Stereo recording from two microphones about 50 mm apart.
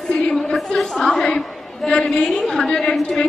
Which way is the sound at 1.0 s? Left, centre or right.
Centre.